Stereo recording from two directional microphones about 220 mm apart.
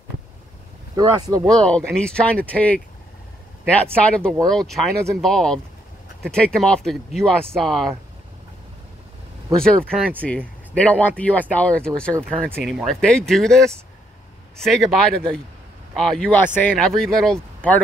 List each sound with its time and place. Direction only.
0.9 s speech: 15° right (ahead or behind)
1.5 s speech: 5° left (ahead or behind)
9.6 s speech: 5° left (ahead or behind)
14.6 s speech: centre (ahead or behind)